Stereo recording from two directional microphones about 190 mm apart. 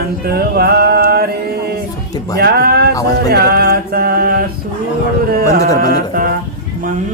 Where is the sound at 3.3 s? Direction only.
55° right (ahead or behind).